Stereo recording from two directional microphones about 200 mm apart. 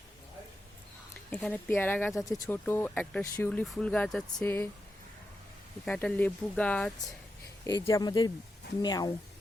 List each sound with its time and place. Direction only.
1.3 s speech: 5° left (ahead or behind)
5.8 s speech: 5° left (ahead or behind)
7.9 s speech: 20° left (ahead or behind)